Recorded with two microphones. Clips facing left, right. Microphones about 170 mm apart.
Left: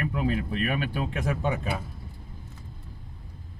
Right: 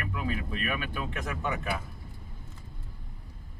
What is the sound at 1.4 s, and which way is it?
Speech, 30° left (ahead or behind).